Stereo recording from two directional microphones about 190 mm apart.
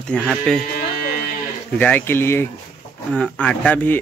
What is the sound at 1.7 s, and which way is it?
Speech, 5° left (ahead or behind).